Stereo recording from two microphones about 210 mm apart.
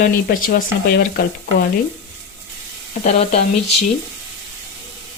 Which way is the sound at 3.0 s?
35° left (ahead or behind).